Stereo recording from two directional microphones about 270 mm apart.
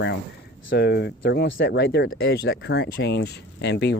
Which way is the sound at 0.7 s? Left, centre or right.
Left.